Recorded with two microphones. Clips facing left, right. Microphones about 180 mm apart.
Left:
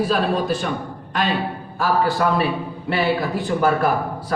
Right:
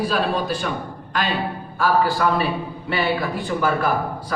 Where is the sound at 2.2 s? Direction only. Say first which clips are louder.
Left 1 dB; 50° left (ahead or behind).